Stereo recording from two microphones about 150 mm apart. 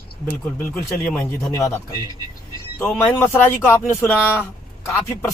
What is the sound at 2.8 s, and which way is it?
Speech, 10° left (ahead or behind).